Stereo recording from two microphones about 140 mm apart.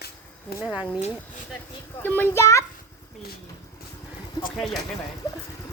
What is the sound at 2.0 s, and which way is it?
Speech, 15° left (ahead or behind).